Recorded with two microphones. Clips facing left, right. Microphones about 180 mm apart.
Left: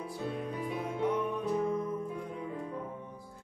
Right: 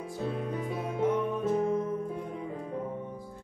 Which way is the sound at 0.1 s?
40° right (ahead or behind).